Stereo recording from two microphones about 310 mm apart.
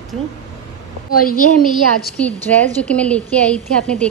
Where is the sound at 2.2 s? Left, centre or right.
Centre.